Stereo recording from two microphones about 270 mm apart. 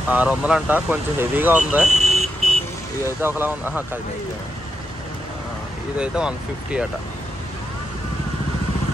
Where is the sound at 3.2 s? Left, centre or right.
Centre.